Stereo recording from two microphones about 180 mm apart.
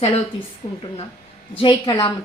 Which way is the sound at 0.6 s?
20° left (ahead or behind).